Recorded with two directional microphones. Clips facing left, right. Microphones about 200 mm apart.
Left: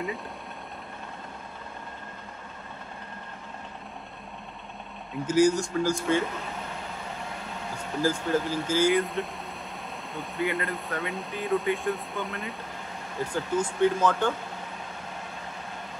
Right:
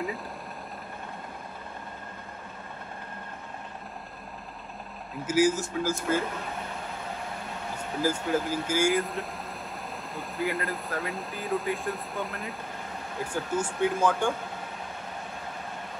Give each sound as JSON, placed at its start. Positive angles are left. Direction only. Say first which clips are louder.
{"t": 5.2, "sound": "speech", "louder": "left 2 dB", "side_deg": -5}
{"t": 8.0, "sound": "speech", "louder": "left 1 dB", "side_deg": -10}